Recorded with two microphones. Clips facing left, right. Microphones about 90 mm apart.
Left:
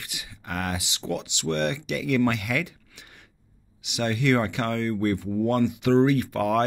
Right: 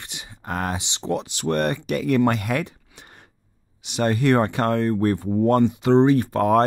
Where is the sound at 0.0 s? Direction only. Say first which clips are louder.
Right 3 dB; 30° right (ahead or behind).